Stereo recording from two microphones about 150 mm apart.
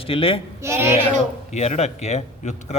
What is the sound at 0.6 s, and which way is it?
Speech, 15° right (ahead or behind).